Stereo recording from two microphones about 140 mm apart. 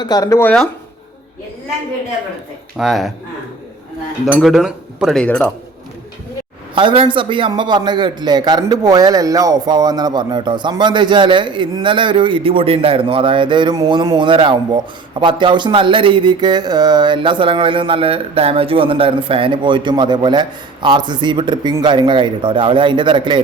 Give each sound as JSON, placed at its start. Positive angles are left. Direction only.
{"t": 0.0, "sound": "speech", "side_deg": 25}
{"t": 2.7, "sound": "speech", "side_deg": 0}
{"t": 4.4, "sound": "a man's voice", "side_deg": 0}
{"t": 6.7, "sound": "speech", "side_deg": -35}